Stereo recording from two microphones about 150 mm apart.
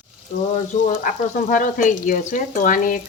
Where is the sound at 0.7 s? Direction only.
60° left (ahead or behind).